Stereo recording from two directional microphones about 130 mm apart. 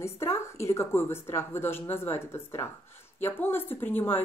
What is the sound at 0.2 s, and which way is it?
A woman's voice, 20° left (ahead or behind).